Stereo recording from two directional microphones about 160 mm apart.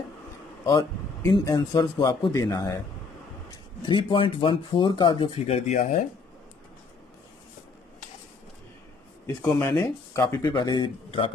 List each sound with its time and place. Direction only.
0.7 s speech: 25° left (ahead or behind)
3.8 s speech: 30° left (ahead or behind)
9.2 s speech: 15° left (ahead or behind); by 11.3 s 35° left (ahead or behind)